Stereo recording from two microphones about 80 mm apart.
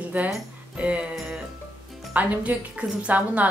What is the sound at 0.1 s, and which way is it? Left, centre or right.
Speech, centre.